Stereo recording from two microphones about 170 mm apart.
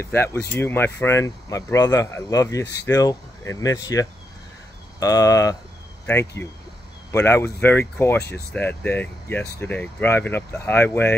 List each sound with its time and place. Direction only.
0.0 s speech: 15° left (ahead or behind)